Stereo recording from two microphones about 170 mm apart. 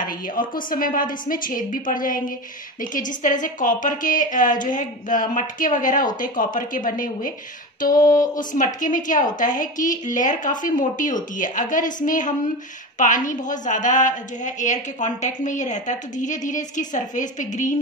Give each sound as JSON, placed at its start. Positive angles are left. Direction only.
{"t": 0.0, "sound": "a woman's voice", "side_deg": 55}